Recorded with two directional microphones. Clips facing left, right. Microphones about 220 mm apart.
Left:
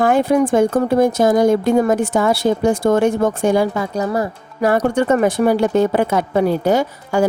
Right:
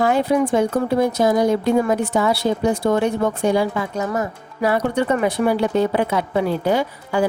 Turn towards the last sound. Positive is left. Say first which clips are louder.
# left 3 dB
turn(degrees=45)  # may be behind; listen again after turning